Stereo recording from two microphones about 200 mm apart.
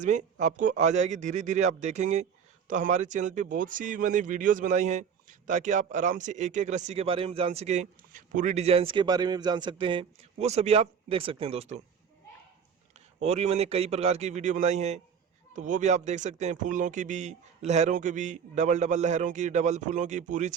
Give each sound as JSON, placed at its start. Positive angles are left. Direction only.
{"t": 0.0, "sound": "speech", "side_deg": -40}
{"t": 13.1, "sound": "speech", "side_deg": -35}